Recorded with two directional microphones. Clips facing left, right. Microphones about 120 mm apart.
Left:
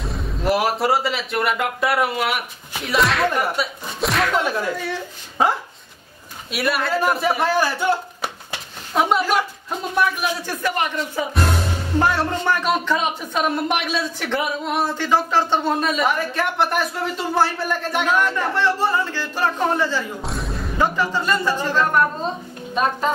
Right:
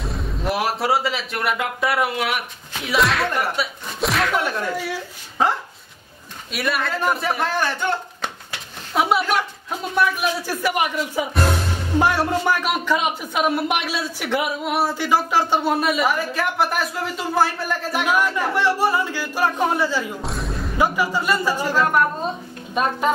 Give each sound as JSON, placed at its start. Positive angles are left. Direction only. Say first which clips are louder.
{"t": 0.0, "sound": "speech", "louder": "left 2 dB", "side_deg": 0}
{"t": 6.5, "sound": "speech", "louder": "left 3 dB", "side_deg": 0}
{"t": 20.2, "sound": "music", "louder": "even", "side_deg": 0}
{"t": 20.8, "sound": "speech", "louder": "even", "side_deg": -10}